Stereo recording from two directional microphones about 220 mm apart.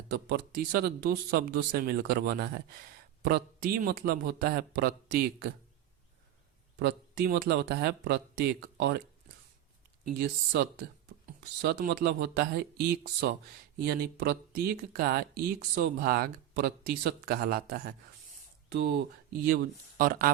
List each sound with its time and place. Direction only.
0.1 s speech: 45° right (ahead or behind)
6.7 s speech: 45° right (ahead or behind)
10.1 s speech: 45° right (ahead or behind)